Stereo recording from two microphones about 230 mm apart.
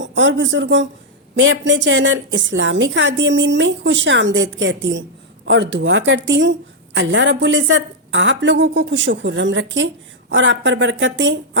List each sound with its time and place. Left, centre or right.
0.0 s a woman's voice: right